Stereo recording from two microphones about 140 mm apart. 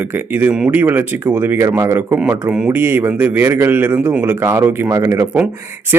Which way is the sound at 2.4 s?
10° right (ahead or behind).